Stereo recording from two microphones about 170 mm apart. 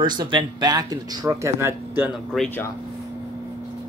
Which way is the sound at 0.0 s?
25° right (ahead or behind).